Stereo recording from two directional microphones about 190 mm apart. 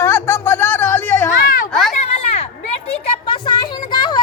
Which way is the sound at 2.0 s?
35° left (ahead or behind).